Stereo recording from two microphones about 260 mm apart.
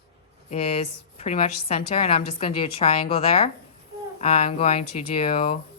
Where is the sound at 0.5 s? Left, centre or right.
Left.